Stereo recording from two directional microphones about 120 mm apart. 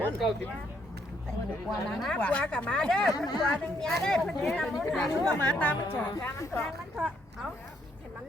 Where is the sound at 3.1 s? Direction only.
30° left (ahead or behind).